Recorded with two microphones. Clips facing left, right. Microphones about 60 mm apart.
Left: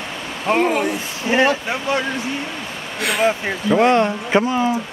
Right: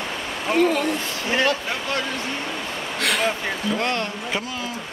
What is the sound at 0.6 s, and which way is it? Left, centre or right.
Speech, left.